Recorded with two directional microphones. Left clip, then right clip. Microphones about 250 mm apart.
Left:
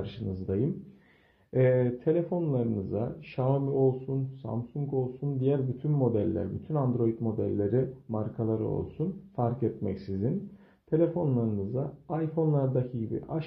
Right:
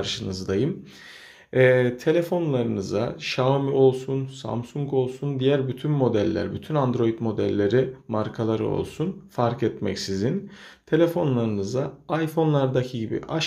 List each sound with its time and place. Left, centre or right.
0.0 s speech: centre
4.4 s speech: right
4.9 s speech: centre